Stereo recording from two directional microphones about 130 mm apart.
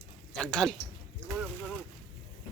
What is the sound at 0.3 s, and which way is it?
Speech, 5° left (ahead or behind).